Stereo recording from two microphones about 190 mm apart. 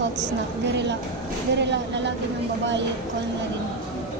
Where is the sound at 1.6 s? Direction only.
65° right (ahead or behind).